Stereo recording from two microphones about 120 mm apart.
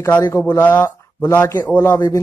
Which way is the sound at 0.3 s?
25° left (ahead or behind).